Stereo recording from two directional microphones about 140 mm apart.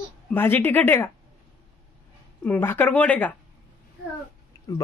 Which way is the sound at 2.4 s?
15° left (ahead or behind).